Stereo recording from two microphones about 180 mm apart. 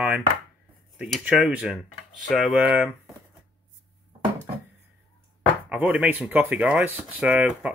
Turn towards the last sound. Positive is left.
turn(degrees=-5)  # may be behind; listen again after turning